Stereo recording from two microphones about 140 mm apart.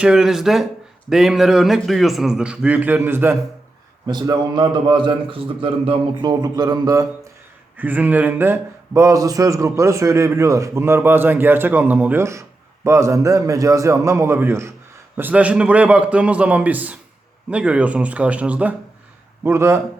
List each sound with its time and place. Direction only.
0.0 s a man's voice: 5° right (ahead or behind)
4.0 s a man's voice: 30° right (ahead or behind)
6.2 s speech: 30° right (ahead or behind)
7.8 s a man's voice: 10° right (ahead or behind)